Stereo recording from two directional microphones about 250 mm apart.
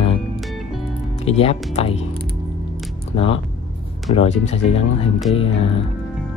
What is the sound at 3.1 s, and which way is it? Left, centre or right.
Speech, left.